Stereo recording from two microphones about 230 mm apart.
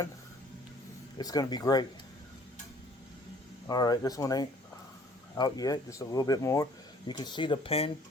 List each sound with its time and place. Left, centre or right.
1.2 s speech: centre
3.7 s speech: centre